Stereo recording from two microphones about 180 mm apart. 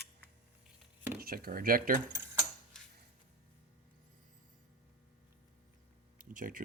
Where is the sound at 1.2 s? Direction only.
55° right (ahead or behind).